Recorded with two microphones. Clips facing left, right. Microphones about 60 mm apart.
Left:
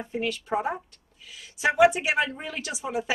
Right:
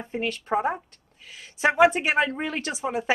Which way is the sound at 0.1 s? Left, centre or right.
Right.